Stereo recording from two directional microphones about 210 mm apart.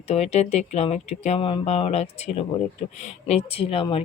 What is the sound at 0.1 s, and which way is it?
Speech, 30° left (ahead or behind).